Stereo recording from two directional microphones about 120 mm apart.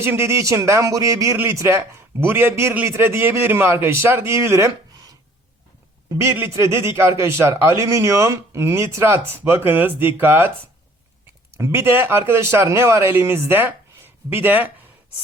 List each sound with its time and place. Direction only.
0.0 s speech: 20° right (ahead or behind)
11.5 s speech: 20° right (ahead or behind)